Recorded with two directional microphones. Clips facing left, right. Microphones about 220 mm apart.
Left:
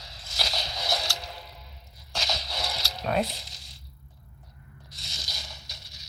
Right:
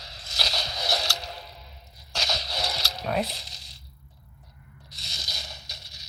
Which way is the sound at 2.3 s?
75° right (ahead or behind).